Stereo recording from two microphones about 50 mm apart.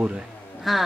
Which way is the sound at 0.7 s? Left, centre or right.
Centre.